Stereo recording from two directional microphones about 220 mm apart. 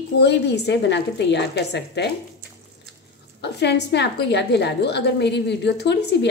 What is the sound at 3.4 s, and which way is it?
A woman's voice, 50° left (ahead or behind).